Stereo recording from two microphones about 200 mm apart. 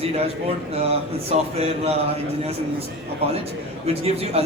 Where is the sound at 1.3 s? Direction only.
30° right (ahead or behind).